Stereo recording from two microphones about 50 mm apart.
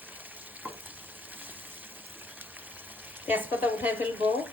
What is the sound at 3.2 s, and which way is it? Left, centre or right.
Frying, right.